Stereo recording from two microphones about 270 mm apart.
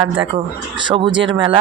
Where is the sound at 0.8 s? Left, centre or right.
Centre.